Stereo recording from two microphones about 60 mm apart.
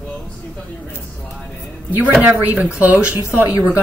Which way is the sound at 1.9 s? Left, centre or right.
Right.